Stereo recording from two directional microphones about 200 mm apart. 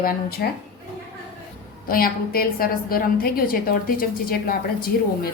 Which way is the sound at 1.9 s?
45° left (ahead or behind).